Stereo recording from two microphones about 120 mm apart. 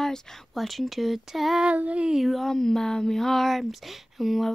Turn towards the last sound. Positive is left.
turn(degrees=0)  # may be behind; listen again after turning